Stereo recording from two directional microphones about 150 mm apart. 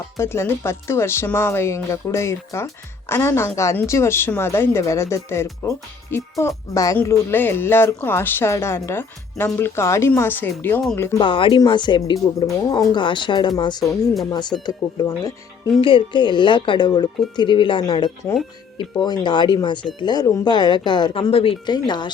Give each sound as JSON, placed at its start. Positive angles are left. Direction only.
{"t": 0.2, "sound": "a woman's voice", "side_deg": 15}
{"t": 11.2, "sound": "speech", "side_deg": 35}
{"t": 13.8, "sound": "speech", "side_deg": 0}
{"t": 14.3, "sound": "speech", "side_deg": 30}
{"t": 15.8, "sound": "speech", "side_deg": 35}